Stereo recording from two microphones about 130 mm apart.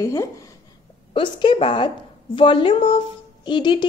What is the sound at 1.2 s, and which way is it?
A woman's voice, 40° left (ahead or behind).